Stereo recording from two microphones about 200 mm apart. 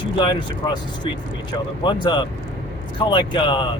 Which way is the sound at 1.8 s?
20° left (ahead or behind).